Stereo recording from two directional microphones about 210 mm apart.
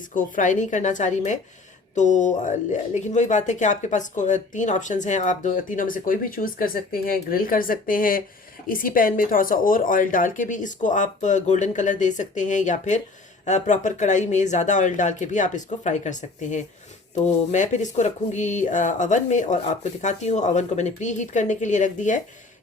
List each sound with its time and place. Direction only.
0.1 s speech: 40° left (ahead or behind)